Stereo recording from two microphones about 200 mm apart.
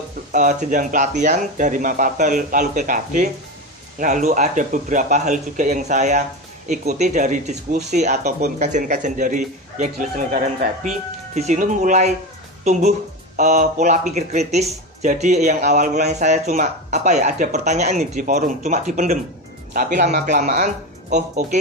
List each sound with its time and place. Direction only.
0.3 s speech: 40° right (ahead or behind)
13.4 s speech: 35° right (ahead or behind)